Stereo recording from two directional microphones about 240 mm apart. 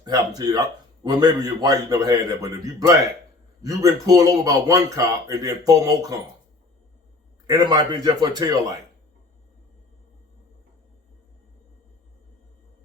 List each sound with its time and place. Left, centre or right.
0.0 s a man's voice: centre
7.4 s a man's voice: centre